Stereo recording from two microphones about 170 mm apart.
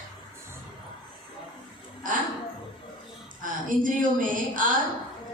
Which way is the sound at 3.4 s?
50° right (ahead or behind).